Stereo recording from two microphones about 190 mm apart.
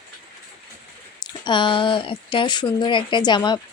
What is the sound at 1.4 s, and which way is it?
Speech, 25° left (ahead or behind).